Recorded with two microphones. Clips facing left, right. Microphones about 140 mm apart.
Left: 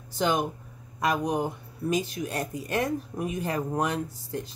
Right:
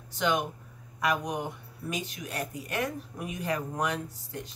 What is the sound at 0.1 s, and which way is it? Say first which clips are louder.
Speech: left 3 dB; 35° left (ahead or behind).